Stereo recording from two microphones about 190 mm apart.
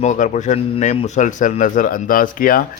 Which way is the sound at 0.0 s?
40° left (ahead or behind).